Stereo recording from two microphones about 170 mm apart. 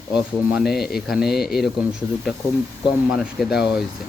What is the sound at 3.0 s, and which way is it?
Speech, 5° right (ahead or behind).